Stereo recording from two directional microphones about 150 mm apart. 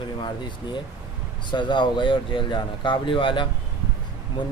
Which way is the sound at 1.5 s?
30° left (ahead or behind).